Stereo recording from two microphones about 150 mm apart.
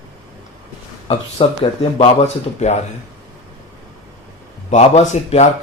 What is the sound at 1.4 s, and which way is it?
Speech, 35° left (ahead or behind).